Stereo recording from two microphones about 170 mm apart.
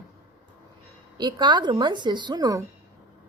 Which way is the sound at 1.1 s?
25° right (ahead or behind).